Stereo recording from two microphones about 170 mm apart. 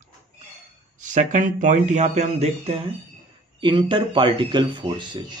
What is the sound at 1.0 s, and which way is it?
Speech, 50° right (ahead or behind).